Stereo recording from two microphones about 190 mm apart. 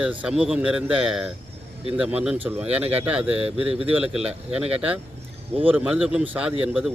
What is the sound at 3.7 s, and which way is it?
Speech, 30° right (ahead or behind).